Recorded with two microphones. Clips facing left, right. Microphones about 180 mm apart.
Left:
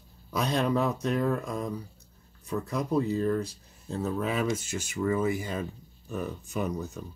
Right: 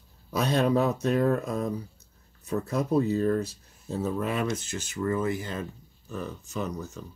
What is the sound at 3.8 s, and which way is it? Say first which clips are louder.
Speech: right 1 dB; centre (ahead or behind).